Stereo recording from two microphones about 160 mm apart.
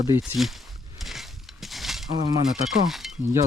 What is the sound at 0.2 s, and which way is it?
Speech, centre (ahead or behind).